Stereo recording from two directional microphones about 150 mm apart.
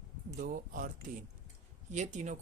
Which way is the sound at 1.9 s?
55° right (ahead or behind).